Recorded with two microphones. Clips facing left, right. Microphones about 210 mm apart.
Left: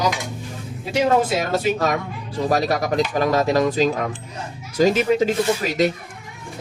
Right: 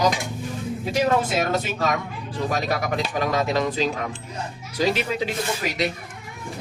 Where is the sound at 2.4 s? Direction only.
40° left (ahead or behind).